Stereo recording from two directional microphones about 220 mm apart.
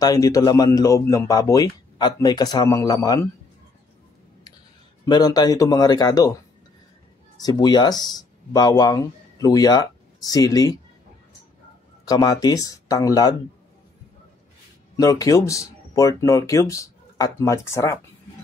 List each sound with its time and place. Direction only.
0.0 s speech: 15° left (ahead or behind)
5.0 s speech: 20° left (ahead or behind)
7.4 s speech: 20° left (ahead or behind)
12.0 s speech: 15° left (ahead or behind)
15.0 s speech: 15° left (ahead or behind)